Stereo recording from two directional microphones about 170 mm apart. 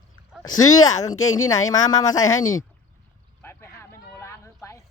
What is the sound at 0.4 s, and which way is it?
Speech, 20° left (ahead or behind).